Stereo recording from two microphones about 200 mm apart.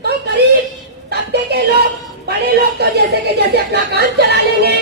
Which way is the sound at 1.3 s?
55° right (ahead or behind).